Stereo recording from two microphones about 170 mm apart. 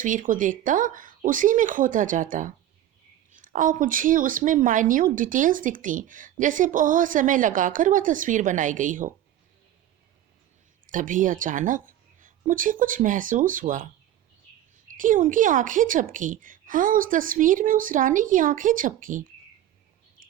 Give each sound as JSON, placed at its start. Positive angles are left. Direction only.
{"t": 0.0, "sound": "a woman's voice", "side_deg": -50}
{"t": 10.8, "sound": "a woman's voice", "side_deg": -50}
{"t": 14.9, "sound": "a woman's voice", "side_deg": -50}